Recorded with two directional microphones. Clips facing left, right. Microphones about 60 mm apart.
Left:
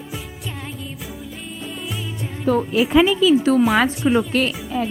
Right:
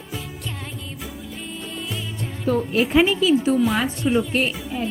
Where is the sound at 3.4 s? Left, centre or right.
Left.